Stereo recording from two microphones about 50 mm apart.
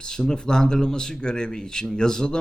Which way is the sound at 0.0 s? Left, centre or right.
Centre.